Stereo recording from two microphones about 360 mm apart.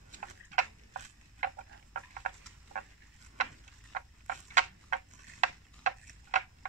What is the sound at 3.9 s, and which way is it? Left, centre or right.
Tick-tock, right.